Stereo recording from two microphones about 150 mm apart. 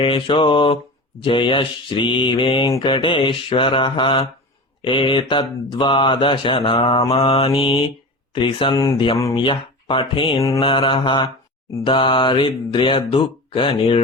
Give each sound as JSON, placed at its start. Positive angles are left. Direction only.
{"t": 0.0, "sound": "mantra", "side_deg": 35}
{"t": 8.8, "sound": "speech", "side_deg": 30}
{"t": 9.3, "sound": "mantra", "side_deg": 35}